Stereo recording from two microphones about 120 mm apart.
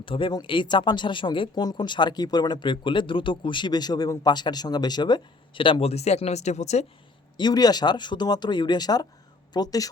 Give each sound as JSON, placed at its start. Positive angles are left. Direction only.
{"t": 0.0, "sound": "speech", "side_deg": 45}
{"t": 7.3, "sound": "speech", "side_deg": 35}